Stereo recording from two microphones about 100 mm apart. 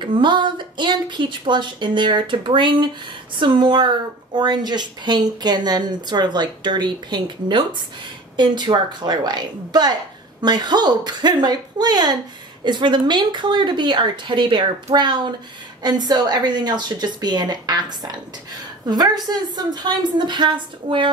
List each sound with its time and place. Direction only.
0.0 s a woman's voice: 50° right (ahead or behind)